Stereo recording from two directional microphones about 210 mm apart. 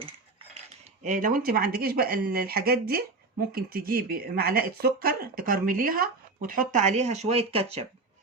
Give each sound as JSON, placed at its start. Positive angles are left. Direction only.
{"t": 1.0, "sound": "speech", "side_deg": -40}